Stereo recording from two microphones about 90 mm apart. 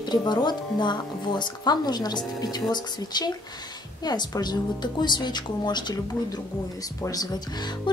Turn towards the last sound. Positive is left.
turn(degrees=45)  # may be behind; listen again after turning